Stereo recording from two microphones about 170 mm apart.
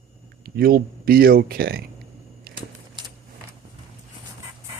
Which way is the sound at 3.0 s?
25° right (ahead or behind).